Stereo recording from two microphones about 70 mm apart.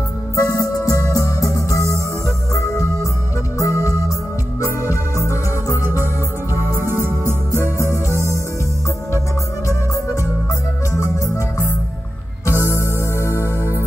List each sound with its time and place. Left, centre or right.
0.4 s music: left
4.6 s music: right
6.5 s music: right
10.9 s music: left